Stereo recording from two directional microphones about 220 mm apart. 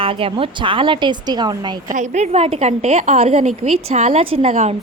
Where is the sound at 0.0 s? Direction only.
25° right (ahead or behind).